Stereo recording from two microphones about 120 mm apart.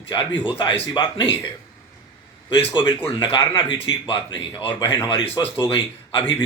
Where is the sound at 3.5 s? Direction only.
40° left (ahead or behind).